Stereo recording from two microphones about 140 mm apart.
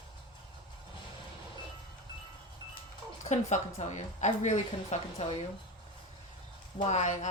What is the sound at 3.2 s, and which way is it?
A woman's voice, 55° left (ahead or behind).